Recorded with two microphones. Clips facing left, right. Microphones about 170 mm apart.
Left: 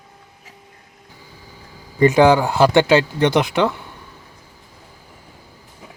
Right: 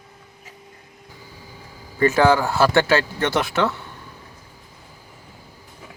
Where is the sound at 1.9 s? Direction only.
15° left (ahead or behind).